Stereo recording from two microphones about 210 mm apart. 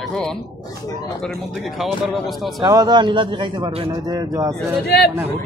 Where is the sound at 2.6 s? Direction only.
20° right (ahead or behind).